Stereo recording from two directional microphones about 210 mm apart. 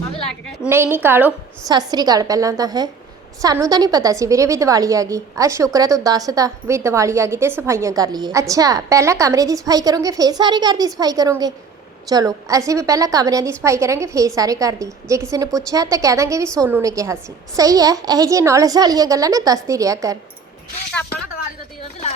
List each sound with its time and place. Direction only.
0.7 s a woman's voice: 10° right (ahead or behind)